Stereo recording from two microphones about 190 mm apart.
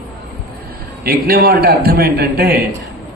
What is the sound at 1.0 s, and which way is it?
A man's voice, 50° right (ahead or behind).